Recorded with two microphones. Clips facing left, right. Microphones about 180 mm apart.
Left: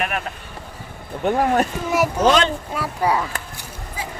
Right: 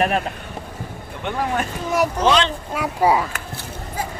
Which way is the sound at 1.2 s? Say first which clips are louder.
Left 5 dB; 40° left (ahead or behind).